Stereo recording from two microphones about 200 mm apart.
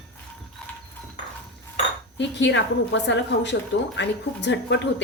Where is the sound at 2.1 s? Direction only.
60° left (ahead or behind).